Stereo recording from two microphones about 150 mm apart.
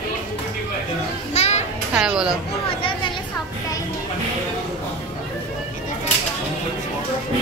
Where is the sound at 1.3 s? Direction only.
45° left (ahead or behind).